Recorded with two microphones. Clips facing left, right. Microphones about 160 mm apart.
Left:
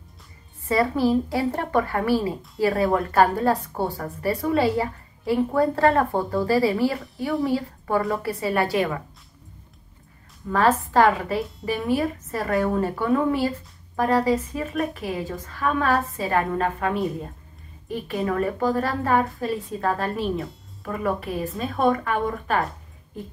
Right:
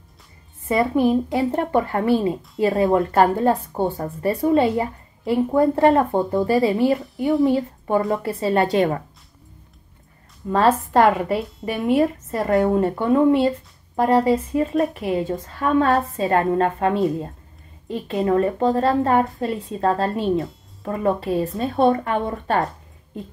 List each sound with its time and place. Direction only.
0.7 s a woman's voice: 20° right (ahead or behind); by 9.0 s 35° right (ahead or behind)
10.5 s a woman's voice: 25° right (ahead or behind)